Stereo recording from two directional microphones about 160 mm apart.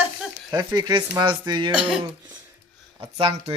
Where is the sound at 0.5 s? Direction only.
25° right (ahead or behind).